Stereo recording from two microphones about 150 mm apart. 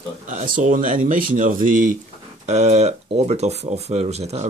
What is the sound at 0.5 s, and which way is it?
Speech, 65° right (ahead or behind).